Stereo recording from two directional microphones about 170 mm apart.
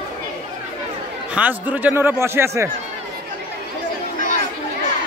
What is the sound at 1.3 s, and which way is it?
A man's voice, 10° right (ahead or behind).